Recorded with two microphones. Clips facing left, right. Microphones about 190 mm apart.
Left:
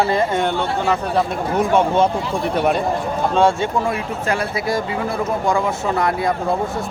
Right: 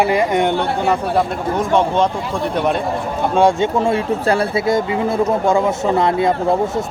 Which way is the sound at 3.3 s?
15° right (ahead or behind).